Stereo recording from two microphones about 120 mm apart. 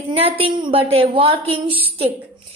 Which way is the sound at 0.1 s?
55° right (ahead or behind).